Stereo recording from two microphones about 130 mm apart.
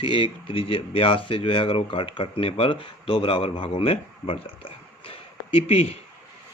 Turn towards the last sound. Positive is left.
turn(degrees=50)  # may be behind; listen again after turning